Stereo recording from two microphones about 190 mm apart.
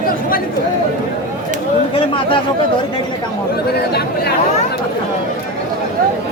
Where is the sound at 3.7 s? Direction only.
55° left (ahead or behind).